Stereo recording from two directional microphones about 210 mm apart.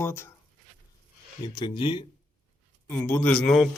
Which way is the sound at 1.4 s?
20° left (ahead or behind).